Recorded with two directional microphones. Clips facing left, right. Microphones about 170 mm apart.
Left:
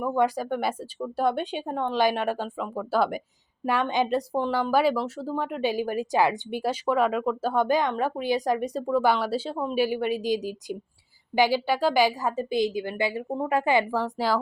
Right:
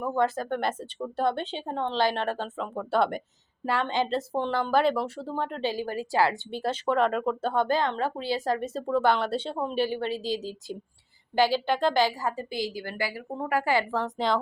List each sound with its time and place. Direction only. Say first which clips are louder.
0.0 s a woman's voice: left 2 dB; 10° left (ahead or behind)
3.7 s a woman's voice: left 2 dB; 15° left (ahead or behind)